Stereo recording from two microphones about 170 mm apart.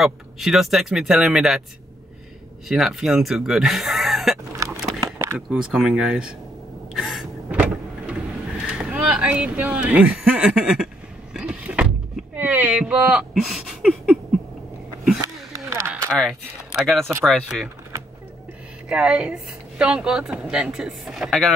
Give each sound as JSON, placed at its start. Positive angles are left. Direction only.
{"t": 0.0, "sound": "speech", "side_deg": 0}
{"t": 2.7, "sound": "speech", "side_deg": 0}
{"t": 4.6, "sound": "a sound", "side_deg": -20}
{"t": 5.5, "sound": "speech", "side_deg": -5}
{"t": 6.9, "sound": "vehicle", "side_deg": 0}
{"t": 8.6, "sound": "speech", "side_deg": -5}
{"t": 11.3, "sound": "vehicle", "side_deg": -5}
{"t": 15.5, "sound": "a sound", "side_deg": -20}
{"t": 16.1, "sound": "speech", "side_deg": 0}
{"t": 18.9, "sound": "a woman's voice", "side_deg": -5}